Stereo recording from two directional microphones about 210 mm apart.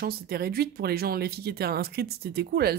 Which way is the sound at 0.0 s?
45° right (ahead or behind).